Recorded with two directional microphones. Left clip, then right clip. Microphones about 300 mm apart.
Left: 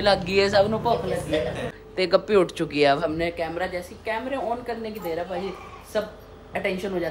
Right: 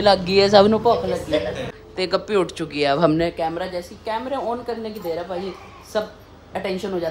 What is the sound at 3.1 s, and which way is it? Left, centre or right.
A woman's voice, centre.